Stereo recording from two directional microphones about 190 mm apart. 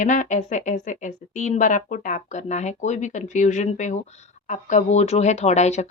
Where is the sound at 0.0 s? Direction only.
40° left (ahead or behind).